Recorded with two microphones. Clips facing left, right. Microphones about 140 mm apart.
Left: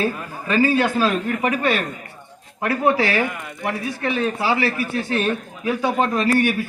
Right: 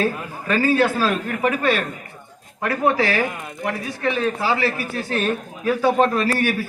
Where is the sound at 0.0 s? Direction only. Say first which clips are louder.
Right 1 dB; 15° left (ahead or behind).